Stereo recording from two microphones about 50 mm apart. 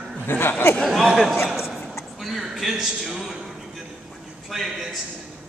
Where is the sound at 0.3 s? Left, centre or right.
Left.